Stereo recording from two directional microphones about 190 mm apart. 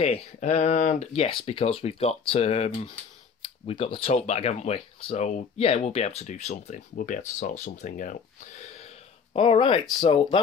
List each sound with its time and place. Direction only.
0.0 s speech: 30° left (ahead or behind)
8.7 s a sound: 30° left (ahead or behind)
9.9 s speech: 25° left (ahead or behind)